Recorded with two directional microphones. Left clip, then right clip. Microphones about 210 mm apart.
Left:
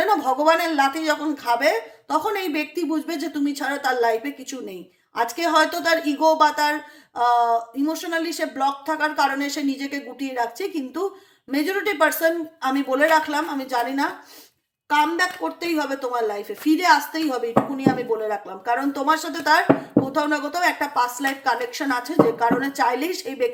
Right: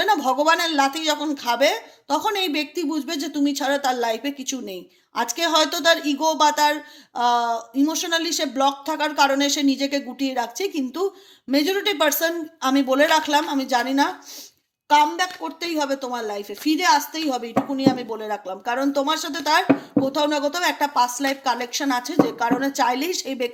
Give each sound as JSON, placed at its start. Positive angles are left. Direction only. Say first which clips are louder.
{"t": 0.0, "sound": "speech", "louder": "even", "side_deg": -35}